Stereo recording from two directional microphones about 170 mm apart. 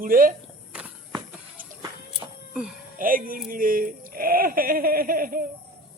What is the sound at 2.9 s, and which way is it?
Speech, 55° right (ahead or behind).